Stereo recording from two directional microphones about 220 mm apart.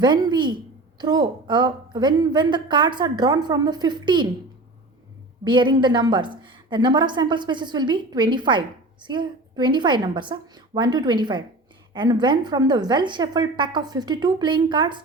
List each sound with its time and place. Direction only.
0.0 s a woman's voice: 20° right (ahead or behind)
5.5 s a woman's voice: 20° right (ahead or behind)